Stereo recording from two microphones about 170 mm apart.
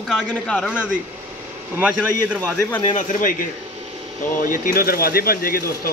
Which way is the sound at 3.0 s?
50° left (ahead or behind).